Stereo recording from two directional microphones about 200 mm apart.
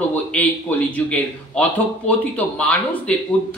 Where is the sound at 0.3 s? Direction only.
5° left (ahead or behind).